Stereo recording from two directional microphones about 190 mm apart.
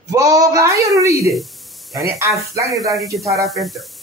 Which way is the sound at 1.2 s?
Centre (ahead or behind).